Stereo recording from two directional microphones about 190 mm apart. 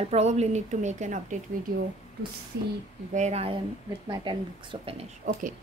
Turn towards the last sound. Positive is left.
turn(degrees=-45)  # may be behind; listen again after turning